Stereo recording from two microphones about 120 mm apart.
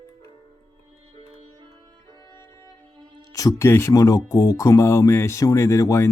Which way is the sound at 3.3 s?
25° left (ahead or behind).